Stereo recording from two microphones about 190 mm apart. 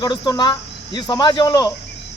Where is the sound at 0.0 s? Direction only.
20° left (ahead or behind).